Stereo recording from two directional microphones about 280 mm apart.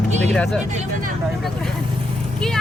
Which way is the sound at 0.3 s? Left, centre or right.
Centre.